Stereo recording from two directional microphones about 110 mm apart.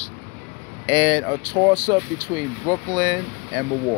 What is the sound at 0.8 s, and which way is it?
Speech, 50° right (ahead or behind).